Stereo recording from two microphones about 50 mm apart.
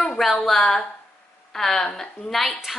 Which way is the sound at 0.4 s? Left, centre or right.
Centre.